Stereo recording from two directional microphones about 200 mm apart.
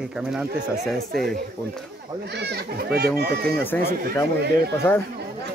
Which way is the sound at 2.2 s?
55° right (ahead or behind).